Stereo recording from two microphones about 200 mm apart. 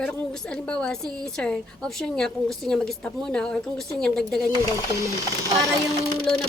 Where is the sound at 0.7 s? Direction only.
5° left (ahead or behind).